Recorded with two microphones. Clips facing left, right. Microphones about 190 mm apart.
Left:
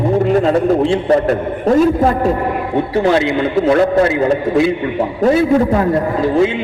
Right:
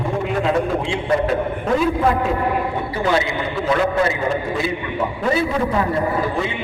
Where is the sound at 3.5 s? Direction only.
40° left (ahead or behind).